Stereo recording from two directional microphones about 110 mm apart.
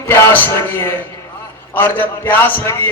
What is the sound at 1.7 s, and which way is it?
A man's voice, 15° left (ahead or behind).